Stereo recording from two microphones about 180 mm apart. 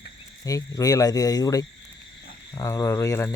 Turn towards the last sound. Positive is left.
turn(degrees=15)  # may be behind; listen again after turning